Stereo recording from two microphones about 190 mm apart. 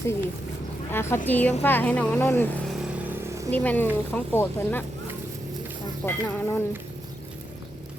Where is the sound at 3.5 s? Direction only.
10° left (ahead or behind).